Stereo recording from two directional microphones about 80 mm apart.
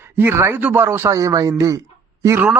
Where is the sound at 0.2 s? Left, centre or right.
Right.